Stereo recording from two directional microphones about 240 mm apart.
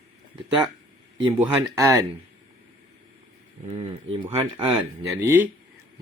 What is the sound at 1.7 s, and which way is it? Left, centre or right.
Speech, centre.